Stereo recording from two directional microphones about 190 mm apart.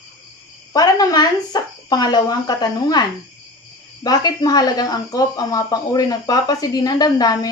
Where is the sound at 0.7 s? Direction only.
20° left (ahead or behind).